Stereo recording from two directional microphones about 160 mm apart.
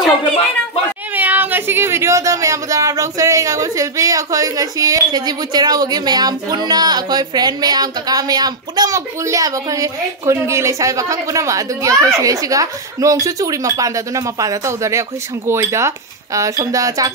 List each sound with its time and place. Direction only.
1.1 s speech: 10° right (ahead or behind)